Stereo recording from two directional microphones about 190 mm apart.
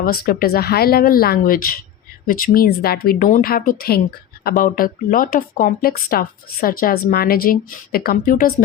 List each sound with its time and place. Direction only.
0.0 s speech: 50° left (ahead or behind)